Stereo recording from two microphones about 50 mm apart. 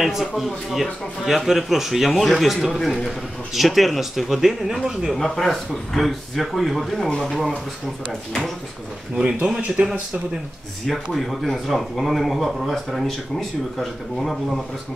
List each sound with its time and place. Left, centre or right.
0.0 s a man's voice: centre
5.1 s a man's voice: centre
9.1 s speech: right
10.9 s a man's voice: centre